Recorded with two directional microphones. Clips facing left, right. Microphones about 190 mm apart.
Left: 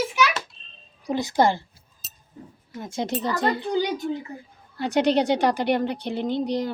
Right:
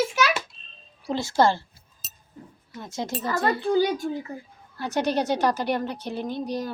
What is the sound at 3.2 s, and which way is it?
A woman's voice, 15° left (ahead or behind).